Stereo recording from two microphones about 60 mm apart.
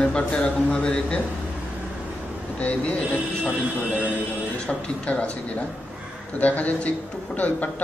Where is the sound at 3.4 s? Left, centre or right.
Right.